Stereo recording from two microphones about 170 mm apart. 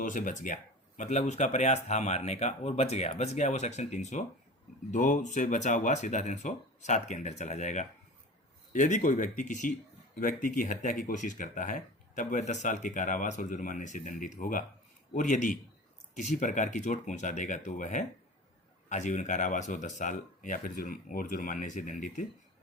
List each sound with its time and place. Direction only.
0.0 s speech: 50° left (ahead or behind)